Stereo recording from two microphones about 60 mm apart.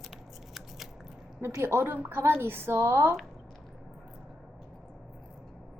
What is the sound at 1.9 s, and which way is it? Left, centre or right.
Speech, right.